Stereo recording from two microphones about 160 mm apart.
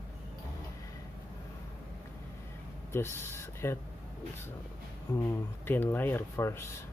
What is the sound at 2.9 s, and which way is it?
Speech, 15° left (ahead or behind).